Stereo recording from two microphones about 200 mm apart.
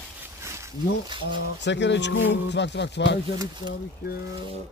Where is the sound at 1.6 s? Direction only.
60° left (ahead or behind).